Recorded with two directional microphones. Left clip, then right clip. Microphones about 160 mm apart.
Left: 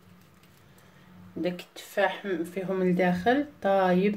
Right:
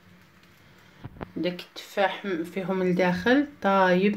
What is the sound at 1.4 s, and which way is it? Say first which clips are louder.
Speech: right 1 dB; 40° right (ahead or behind).